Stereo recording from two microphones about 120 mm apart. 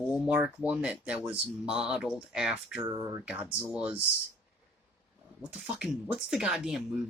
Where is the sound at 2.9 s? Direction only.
25° right (ahead or behind).